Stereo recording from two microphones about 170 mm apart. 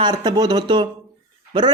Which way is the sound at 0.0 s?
25° right (ahead or behind).